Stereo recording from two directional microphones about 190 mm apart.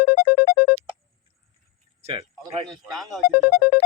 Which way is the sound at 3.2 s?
55° left (ahead or behind).